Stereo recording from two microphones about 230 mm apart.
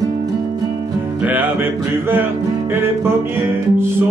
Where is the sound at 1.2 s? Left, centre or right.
Centre.